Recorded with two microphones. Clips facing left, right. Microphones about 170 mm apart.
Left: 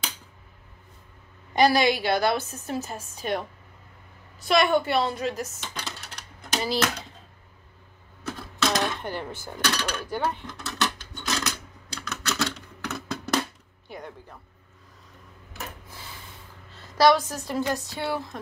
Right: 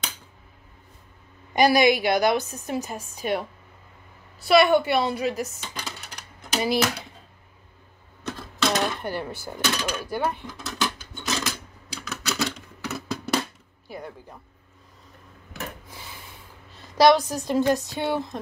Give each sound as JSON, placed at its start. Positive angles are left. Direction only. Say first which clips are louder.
{"t": 1.5, "sound": "a woman's voice", "louder": "right 2 dB", "side_deg": -15}
{"t": 4.4, "sound": "a sound", "louder": "right 4 dB", "side_deg": -10}
{"t": 6.6, "sound": "a woman's voice", "louder": "right 3 dB", "side_deg": -15}
{"t": 8.3, "sound": "speech", "louder": "right 1 dB", "side_deg": 0}
{"t": 10.6, "sound": "a sound", "louder": "even", "side_deg": 0}
{"t": 16.7, "sound": "a woman's voice", "louder": "right 2 dB", "side_deg": -20}